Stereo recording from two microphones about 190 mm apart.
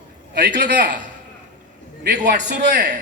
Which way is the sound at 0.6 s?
65° right (ahead or behind).